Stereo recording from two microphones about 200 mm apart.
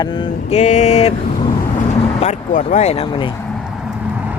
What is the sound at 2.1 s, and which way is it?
Speech, 35° left (ahead or behind).